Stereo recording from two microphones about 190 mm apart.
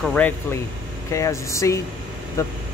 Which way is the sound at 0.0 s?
5° left (ahead or behind).